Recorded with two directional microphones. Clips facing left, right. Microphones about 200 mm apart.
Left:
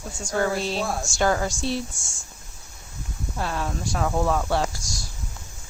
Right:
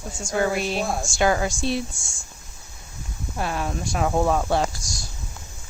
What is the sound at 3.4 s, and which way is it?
Speech, 15° right (ahead or behind).